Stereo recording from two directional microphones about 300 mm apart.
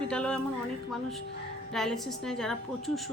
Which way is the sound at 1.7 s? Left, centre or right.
Centre.